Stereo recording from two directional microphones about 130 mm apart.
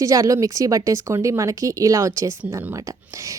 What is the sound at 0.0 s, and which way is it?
A woman's voice, 25° right (ahead or behind).